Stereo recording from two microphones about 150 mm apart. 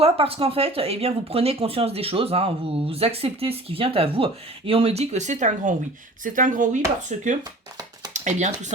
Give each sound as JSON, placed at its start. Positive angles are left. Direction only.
{"t": 0.0, "sound": "speech", "side_deg": -40}
{"t": 7.4, "sound": "a sound", "side_deg": -25}
{"t": 8.1, "sound": "speech", "side_deg": -50}